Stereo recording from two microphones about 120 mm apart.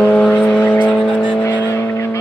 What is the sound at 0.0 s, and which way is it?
Vehicle, 10° left (ahead or behind).